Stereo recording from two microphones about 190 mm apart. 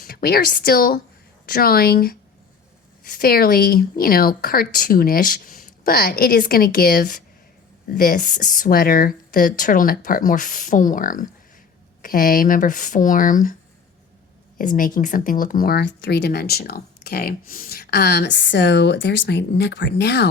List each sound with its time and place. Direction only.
0.0 s a woman's voice: 55° left (ahead or behind)
14.6 s speech: 45° left (ahead or behind); by 20.3 s 65° left (ahead or behind)